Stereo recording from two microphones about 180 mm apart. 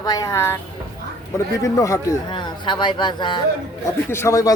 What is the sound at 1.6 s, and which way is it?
Speech, 15° left (ahead or behind).